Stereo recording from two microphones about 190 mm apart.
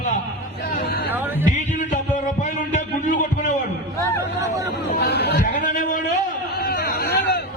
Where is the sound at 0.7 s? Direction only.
55° left (ahead or behind).